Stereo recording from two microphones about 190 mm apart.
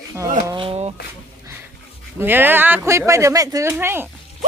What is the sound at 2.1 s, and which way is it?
Speech, 10° right (ahead or behind).